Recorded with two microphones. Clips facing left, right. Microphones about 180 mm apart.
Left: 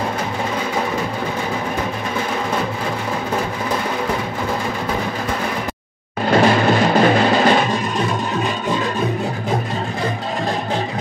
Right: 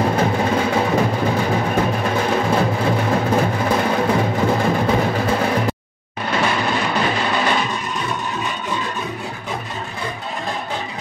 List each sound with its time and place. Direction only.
6.3 s music: 40° left (ahead or behind)